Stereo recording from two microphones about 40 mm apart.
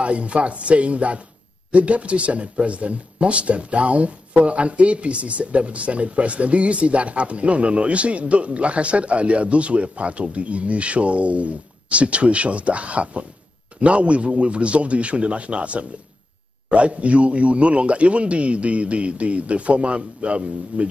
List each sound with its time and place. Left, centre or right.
0.0 s speech: right